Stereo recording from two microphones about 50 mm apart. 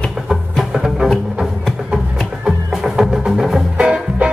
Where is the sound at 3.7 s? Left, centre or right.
Right.